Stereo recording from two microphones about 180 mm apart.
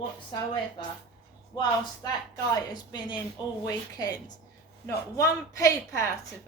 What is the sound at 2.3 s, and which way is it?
Speech, 25° left (ahead or behind).